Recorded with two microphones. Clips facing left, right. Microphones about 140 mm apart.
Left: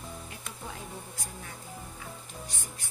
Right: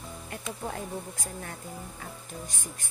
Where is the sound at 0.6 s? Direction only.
50° right (ahead or behind).